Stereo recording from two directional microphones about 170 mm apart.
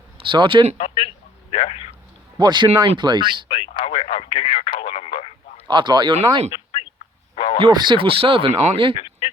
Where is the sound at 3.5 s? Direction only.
30° left (ahead or behind).